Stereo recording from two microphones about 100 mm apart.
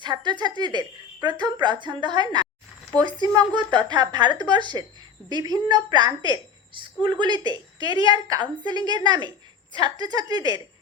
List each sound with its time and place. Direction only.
0.0 s a woman's voice: 50° right (ahead or behind)
6.7 s speech: 55° right (ahead or behind)